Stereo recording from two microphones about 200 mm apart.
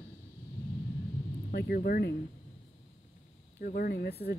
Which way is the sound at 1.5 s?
50° left (ahead or behind).